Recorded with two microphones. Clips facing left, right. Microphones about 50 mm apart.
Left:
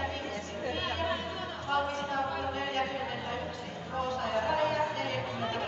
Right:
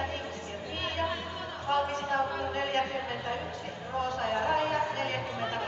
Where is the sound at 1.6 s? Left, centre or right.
Right.